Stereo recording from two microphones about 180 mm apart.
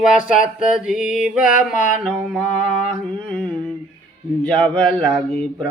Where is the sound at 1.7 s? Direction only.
45° left (ahead or behind).